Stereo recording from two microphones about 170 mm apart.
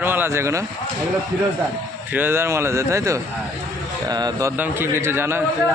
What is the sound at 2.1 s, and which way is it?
A man's voice, 10° right (ahead or behind).